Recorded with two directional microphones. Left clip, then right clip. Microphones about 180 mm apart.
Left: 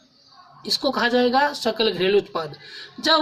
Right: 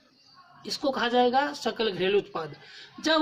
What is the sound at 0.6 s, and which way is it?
Speech, 20° right (ahead or behind).